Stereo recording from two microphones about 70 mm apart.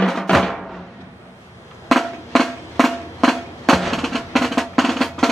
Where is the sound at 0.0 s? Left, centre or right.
Centre.